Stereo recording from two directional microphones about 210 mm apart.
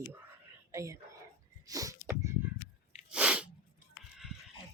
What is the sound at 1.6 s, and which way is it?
Sneeze, 15° right (ahead or behind).